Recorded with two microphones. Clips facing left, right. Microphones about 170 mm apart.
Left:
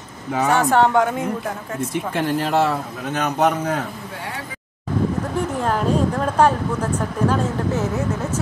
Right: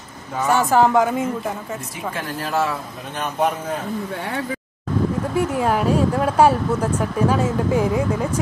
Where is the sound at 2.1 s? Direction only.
65° left (ahead or behind).